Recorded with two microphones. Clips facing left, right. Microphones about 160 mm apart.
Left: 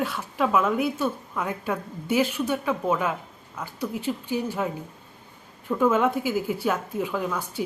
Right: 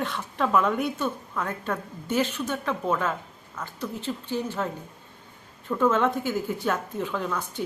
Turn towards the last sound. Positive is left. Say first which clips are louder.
# left 2 dB
turn(degrees=10)  # may be behind; listen again after turning